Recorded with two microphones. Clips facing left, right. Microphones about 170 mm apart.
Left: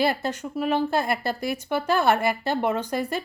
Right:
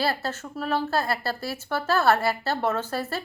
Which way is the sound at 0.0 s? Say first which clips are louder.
Left 3 dB; 15° left (ahead or behind).